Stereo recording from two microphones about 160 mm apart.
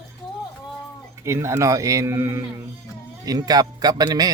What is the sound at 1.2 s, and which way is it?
Speech, 15° right (ahead or behind).